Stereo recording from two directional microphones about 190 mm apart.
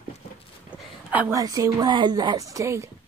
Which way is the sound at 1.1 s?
10° right (ahead or behind).